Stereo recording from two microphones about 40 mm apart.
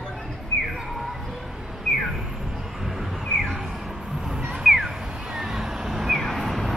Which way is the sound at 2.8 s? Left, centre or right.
Centre.